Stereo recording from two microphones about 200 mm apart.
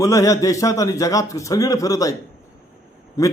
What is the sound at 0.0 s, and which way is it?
A man's voice, 15° left (ahead or behind).